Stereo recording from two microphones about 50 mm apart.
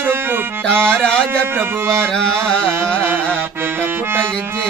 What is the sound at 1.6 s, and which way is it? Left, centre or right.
Music, right.